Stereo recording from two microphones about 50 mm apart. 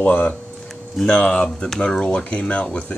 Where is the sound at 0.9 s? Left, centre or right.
Left.